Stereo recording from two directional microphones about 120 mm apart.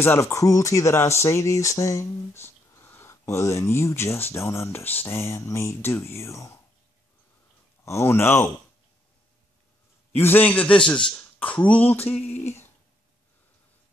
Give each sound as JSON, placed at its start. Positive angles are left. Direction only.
{"t": 0.0, "sound": "speech", "side_deg": 20}
{"t": 7.8, "sound": "speech", "side_deg": 20}
{"t": 10.1, "sound": "a man's voice", "side_deg": 15}